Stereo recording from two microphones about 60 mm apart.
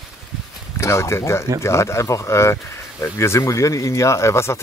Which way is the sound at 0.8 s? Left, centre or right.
Left.